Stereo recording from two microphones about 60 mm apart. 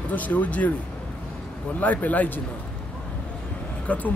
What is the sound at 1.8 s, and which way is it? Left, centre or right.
Speech, left.